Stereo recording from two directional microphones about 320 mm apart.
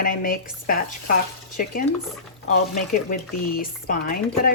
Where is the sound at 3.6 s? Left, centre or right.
Left.